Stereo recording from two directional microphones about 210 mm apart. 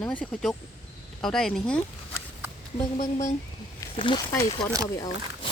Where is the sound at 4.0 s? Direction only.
20° left (ahead or behind).